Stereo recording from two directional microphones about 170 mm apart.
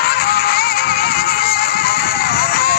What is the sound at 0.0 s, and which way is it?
Music, 65° left (ahead or behind).